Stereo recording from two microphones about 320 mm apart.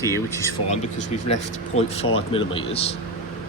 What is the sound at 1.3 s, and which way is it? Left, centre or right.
A man's voice, centre.